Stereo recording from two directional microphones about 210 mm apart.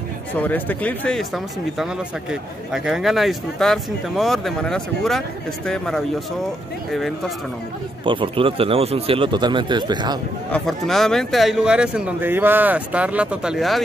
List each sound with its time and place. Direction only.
0.4 s speech: 5° left (ahead or behind)
8.0 s speech: 25° right (ahead or behind)
10.5 s speech: centre (ahead or behind)